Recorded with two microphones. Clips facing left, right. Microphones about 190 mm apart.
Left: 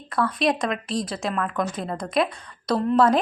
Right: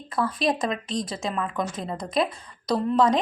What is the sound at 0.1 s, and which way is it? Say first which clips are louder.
Speech: left 2 dB; 25° right (ahead or behind).